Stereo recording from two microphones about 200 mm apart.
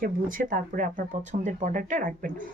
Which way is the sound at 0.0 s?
45° right (ahead or behind).